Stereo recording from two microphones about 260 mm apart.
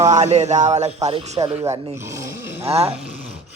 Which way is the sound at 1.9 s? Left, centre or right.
Centre.